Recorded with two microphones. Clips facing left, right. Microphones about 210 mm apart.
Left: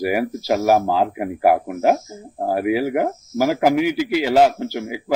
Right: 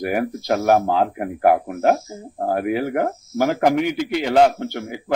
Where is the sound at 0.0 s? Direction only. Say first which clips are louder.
Left 1 dB; 5° left (ahead or behind).